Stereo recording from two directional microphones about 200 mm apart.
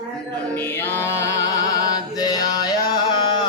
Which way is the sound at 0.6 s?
10° left (ahead or behind).